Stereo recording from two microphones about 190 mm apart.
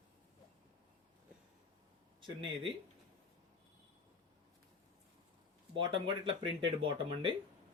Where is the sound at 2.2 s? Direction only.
25° right (ahead or behind).